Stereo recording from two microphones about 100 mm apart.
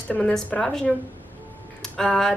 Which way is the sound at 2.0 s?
5° left (ahead or behind).